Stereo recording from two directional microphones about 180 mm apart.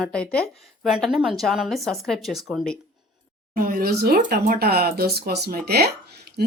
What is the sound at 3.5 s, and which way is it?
Speech, 50° right (ahead or behind).